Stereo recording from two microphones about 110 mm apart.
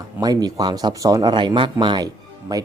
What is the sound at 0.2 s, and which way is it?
Speech, 35° right (ahead or behind).